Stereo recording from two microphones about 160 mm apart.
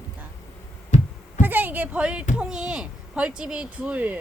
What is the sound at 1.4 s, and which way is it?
A woman's voice, 10° right (ahead or behind).